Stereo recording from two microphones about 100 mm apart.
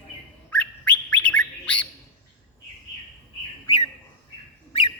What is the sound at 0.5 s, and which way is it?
Bird, 15° left (ahead or behind).